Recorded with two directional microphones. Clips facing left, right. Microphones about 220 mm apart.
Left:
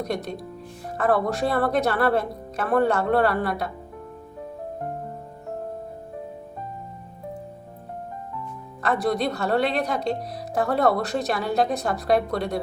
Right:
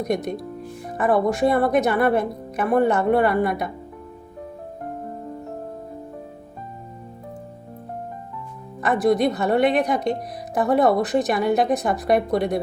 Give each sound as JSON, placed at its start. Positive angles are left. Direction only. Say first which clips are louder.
{"t": 0.9, "sound": "speech", "louder": "right 3 dB", "side_deg": -15}
{"t": 8.8, "sound": "speech", "louder": "right 5 dB", "side_deg": -15}